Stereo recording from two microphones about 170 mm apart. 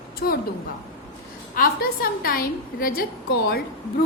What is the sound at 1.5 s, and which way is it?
A woman's voice, 60° left (ahead or behind).